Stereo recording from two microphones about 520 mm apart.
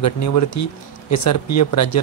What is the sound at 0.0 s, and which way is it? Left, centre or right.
A man's voice, left.